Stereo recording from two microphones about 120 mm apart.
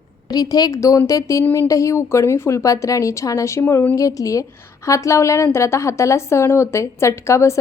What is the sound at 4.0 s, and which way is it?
A woman's voice, 30° left (ahead or behind).